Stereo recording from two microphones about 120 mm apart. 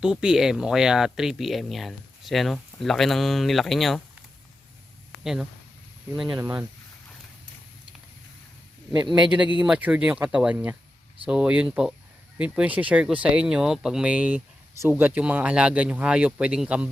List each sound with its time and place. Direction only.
0.0 s speech: 5° right (ahead or behind)
5.2 s speech: 5° right (ahead or behind)
6.3 s speech: 20° right (ahead or behind)
9.0 s speech: 10° right (ahead or behind)